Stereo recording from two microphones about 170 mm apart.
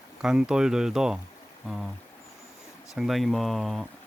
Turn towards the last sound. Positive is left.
turn(degrees=0)  # may be behind; listen again after turning